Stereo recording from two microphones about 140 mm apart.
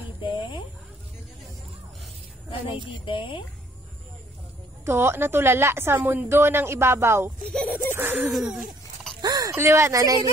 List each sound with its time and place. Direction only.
0.2 s a sound: 35° left (ahead or behind)
2.9 s speech: 40° left (ahead or behind)
4.8 s a woman's voice: 15° right (ahead or behind)
7.5 s speech: 10° left (ahead or behind)
7.9 s a woman's voice: 15° right (ahead or behind)
8.3 s hoot: centre (ahead or behind)
9.2 s speech: 25° right (ahead or behind)